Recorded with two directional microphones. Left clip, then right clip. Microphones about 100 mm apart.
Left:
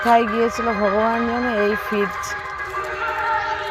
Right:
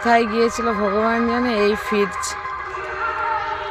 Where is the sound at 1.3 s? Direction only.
40° right (ahead or behind).